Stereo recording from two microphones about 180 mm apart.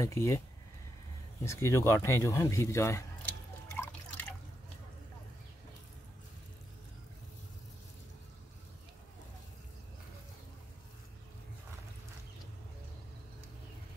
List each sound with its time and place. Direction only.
0.0 s speech: 15° left (ahead or behind)
1.4 s speech: 15° left (ahead or behind)
3.7 s drip: 10° left (ahead or behind)